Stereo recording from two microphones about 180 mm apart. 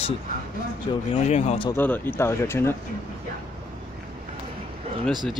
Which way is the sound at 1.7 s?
10° left (ahead or behind).